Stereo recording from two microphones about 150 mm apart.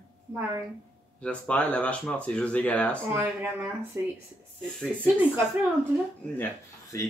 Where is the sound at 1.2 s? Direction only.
10° left (ahead or behind).